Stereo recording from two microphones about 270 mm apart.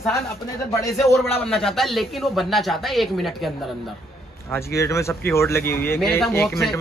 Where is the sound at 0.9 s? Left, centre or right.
Centre.